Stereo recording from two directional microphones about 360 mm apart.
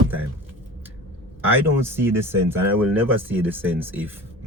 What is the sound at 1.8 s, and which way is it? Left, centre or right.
Speech, centre.